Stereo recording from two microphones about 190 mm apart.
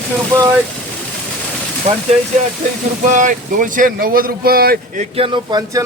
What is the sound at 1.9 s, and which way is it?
Speech, 35° right (ahead or behind).